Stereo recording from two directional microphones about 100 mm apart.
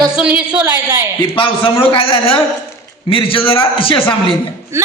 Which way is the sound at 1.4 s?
60° left (ahead or behind).